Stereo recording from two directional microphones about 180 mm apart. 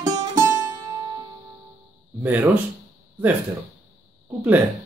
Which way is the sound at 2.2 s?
10° right (ahead or behind).